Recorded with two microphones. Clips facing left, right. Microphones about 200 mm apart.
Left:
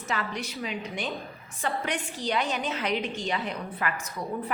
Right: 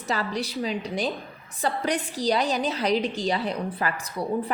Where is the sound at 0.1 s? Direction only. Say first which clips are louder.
Right 5 dB; 35° right (ahead or behind).